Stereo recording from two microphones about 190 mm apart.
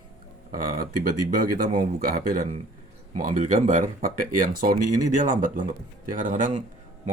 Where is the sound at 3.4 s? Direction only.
40° right (ahead or behind).